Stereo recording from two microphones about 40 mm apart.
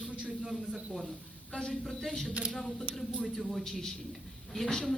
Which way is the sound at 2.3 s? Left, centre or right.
Right.